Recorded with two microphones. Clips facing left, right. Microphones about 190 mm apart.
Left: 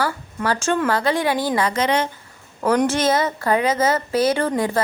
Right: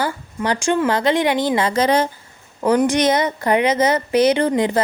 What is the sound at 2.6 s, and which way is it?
A woman's voice, 15° right (ahead or behind).